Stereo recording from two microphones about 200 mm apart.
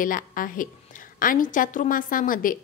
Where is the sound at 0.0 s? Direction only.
45° left (ahead or behind).